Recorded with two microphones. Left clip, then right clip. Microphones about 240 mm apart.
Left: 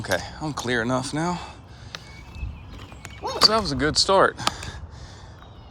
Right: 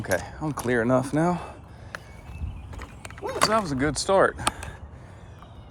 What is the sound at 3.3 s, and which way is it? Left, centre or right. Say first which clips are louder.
Speech: left 3 dB; centre.